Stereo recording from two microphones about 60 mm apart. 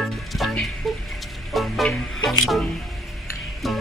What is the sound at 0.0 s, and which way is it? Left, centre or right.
Music, centre.